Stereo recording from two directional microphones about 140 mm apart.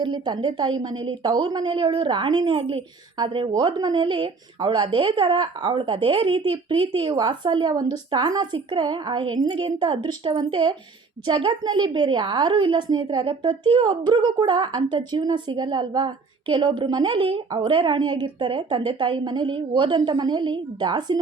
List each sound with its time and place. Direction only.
0.0 s a woman's voice: 30° right (ahead or behind)